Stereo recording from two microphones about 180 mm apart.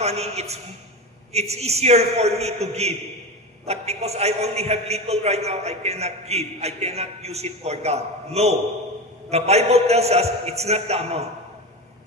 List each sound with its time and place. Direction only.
0.0 s a man's voice: 35° right (ahead or behind)